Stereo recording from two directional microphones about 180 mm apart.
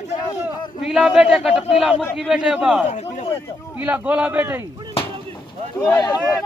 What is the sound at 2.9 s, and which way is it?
Speech, 35° left (ahead or behind).